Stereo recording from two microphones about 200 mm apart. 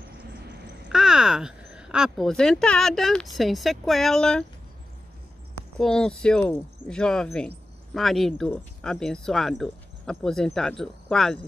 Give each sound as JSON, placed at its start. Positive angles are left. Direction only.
{"t": 0.8, "sound": "speech", "side_deg": -5}
{"t": 5.8, "sound": "speech", "side_deg": 5}